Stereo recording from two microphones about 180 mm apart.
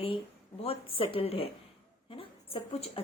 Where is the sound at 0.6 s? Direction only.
30° left (ahead or behind).